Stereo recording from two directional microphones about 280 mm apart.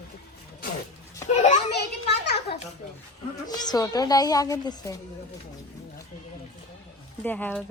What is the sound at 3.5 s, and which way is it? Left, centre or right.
A woman's voice, centre.